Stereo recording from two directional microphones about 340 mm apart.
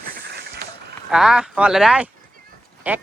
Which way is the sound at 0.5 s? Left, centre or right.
Right.